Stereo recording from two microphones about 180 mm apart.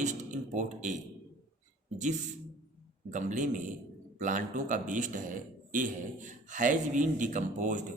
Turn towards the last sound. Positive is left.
turn(degrees=-45)  # may be behind; listen again after turning